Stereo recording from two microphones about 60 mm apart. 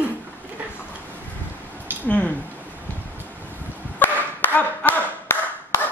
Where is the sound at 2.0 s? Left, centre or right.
Left.